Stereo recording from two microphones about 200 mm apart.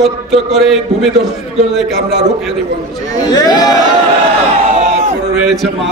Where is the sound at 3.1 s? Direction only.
20° left (ahead or behind).